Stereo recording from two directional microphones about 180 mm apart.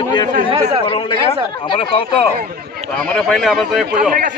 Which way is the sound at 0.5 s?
30° right (ahead or behind).